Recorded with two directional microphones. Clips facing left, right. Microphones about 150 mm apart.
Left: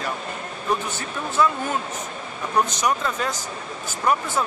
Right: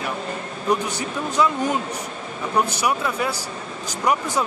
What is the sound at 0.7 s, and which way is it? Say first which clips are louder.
Speech: right 2 dB; 15° right (ahead or behind).